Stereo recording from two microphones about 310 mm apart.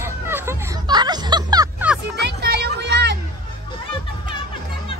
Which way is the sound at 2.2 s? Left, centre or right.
Right.